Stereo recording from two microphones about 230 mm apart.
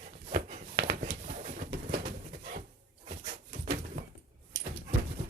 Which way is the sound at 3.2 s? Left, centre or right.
Right.